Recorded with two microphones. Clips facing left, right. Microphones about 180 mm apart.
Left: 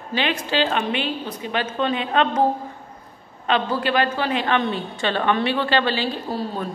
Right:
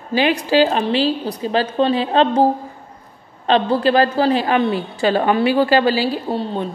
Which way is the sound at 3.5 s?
35° right (ahead or behind).